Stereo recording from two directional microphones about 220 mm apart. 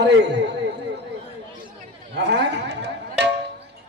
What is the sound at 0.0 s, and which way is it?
Speech, 50° right (ahead or behind).